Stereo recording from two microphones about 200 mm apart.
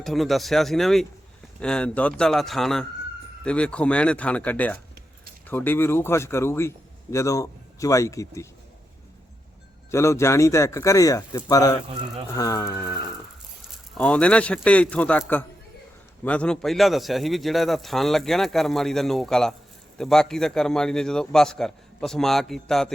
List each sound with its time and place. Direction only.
0.0 s a man's voice: centre (ahead or behind)
9.9 s speech: 15° left (ahead or behind)
13.7 s speech: 5° left (ahead or behind)
16.2 s a man's voice: 5° left (ahead or behind)